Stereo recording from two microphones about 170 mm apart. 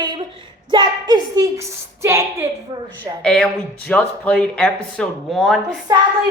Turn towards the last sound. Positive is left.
turn(degrees=-20)  # may be behind; listen again after turning